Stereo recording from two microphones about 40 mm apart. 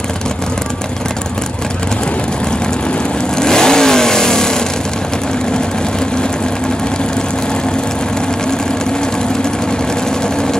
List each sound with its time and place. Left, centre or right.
3.3 s vehicle: centre